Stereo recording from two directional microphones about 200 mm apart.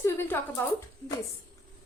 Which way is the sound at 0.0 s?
10° left (ahead or behind).